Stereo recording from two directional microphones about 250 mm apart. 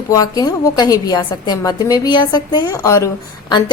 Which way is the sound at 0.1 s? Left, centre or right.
Centre.